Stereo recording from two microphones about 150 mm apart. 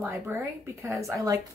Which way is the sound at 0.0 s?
15° right (ahead or behind).